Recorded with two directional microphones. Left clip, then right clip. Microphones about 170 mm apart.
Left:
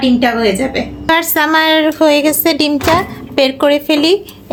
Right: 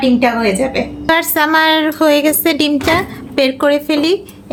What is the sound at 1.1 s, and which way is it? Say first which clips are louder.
A woman's voice: left 1 dB; centre (ahead or behind).